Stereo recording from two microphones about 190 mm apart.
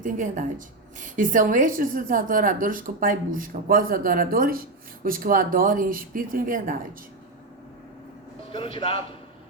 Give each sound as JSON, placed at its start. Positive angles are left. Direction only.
{"t": 0.0, "sound": "a woman's voice", "side_deg": -40}
{"t": 8.5, "sound": "speech", "side_deg": 30}